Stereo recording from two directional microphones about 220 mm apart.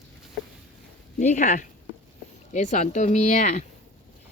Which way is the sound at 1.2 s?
35° left (ahead or behind).